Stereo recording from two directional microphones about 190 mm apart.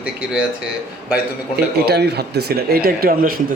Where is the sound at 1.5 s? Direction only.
60° right (ahead or behind).